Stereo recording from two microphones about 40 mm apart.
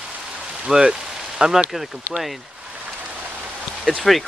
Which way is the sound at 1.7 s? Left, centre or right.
Centre.